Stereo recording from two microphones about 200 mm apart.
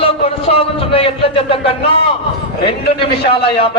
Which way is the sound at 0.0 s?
30° left (ahead or behind).